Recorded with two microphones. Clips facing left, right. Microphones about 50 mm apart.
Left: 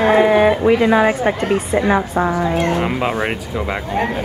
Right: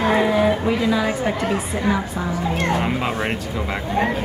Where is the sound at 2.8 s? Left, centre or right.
Centre.